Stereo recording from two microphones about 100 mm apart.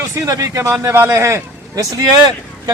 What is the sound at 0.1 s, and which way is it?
A man's voice, 35° right (ahead or behind).